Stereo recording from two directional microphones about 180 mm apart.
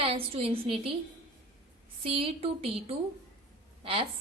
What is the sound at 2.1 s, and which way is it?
Speech, 30° right (ahead or behind).